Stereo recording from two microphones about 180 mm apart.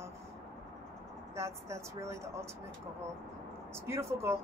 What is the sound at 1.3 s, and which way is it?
A woman's voice, 15° right (ahead or behind).